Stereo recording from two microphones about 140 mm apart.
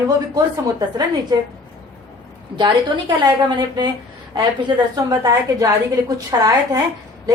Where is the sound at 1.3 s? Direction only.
30° right (ahead or behind).